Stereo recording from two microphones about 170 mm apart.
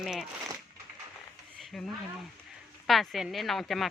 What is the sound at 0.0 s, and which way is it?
Speech, 5° right (ahead or behind).